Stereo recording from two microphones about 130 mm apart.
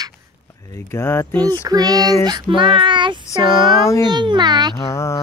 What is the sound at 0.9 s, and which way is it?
Speech, 20° left (ahead or behind).